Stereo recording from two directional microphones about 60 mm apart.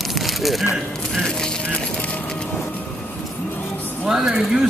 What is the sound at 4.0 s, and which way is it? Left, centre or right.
Speech, centre.